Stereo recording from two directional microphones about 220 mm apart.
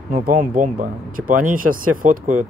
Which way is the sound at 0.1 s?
40° right (ahead or behind).